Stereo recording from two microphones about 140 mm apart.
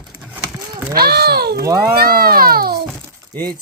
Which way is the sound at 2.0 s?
90° right.